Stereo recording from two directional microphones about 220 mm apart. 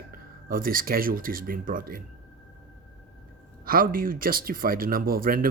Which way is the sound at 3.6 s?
40° right (ahead or behind).